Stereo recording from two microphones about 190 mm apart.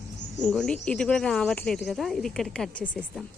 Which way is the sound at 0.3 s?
5° left (ahead or behind).